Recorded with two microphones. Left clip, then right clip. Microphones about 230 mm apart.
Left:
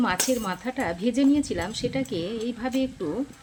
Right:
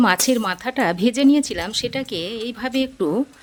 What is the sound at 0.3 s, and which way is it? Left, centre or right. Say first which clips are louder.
Speech: right 6 dB; right.